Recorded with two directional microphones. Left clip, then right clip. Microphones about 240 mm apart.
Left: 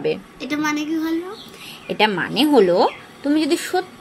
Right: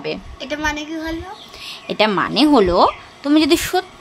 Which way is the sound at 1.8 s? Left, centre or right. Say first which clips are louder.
Right 2 dB; centre.